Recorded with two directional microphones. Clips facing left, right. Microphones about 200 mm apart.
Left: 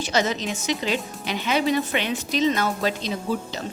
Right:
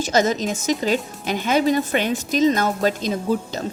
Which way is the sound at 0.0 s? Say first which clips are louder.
Right 4 dB; 45° right (ahead or behind).